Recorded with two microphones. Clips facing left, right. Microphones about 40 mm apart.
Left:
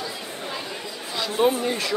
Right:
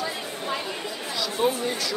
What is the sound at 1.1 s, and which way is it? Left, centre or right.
Speech, left.